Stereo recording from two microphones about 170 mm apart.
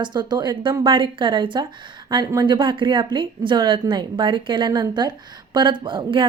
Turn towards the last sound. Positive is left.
turn(degrees=-30)  # may be behind; listen again after turning